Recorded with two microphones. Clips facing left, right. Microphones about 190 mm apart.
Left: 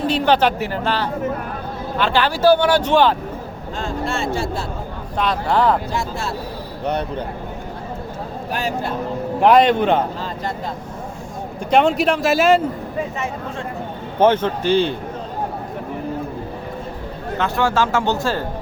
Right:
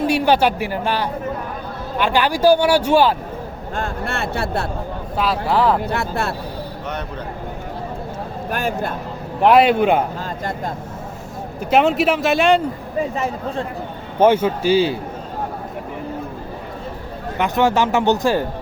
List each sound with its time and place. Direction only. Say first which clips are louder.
0.1 s speech: left 1 dB; 10° right (ahead or behind)
3.8 s speech: left 1 dB; 60° right (ahead or behind)
5.1 s a man's voice: even; 5° right (ahead or behind)
5.9 s speech: right 2 dB; 60° right (ahead or behind)
8.4 s speech: right 1 dB; 50° right (ahead or behind)
9.4 s speech: right 1 dB; 5° right (ahead or behind)
11.6 s a man's voice: even; 5° right (ahead or behind)
13.1 s speech: right 3 dB; 35° right (ahead or behind)
14.2 s speech: right 1 dB; 10° right (ahead or behind)
17.3 s speech: right 2 dB; 20° right (ahead or behind)